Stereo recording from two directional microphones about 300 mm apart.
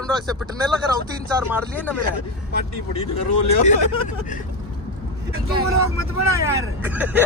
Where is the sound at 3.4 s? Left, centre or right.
Left.